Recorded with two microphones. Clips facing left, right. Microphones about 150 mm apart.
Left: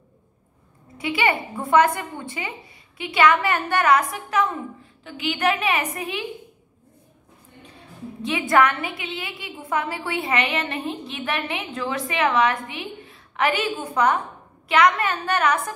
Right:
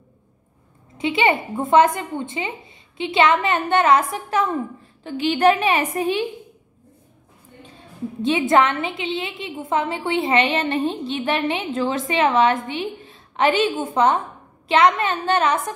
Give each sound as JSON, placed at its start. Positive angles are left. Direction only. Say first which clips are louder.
{"t": 0.9, "sound": "a woman's voice", "louder": "right 4 dB", "side_deg": -25}
{"t": 8.2, "sound": "a woman's voice", "louder": "right 2 dB", "side_deg": -25}